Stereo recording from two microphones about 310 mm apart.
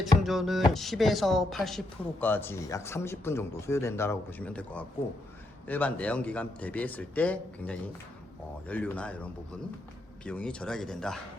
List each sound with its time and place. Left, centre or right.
0.0 s a man's voice: centre